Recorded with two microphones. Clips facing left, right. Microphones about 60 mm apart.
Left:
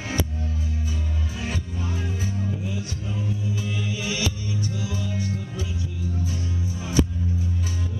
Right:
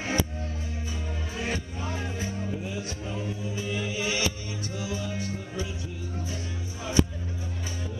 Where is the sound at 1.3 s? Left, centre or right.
Centre.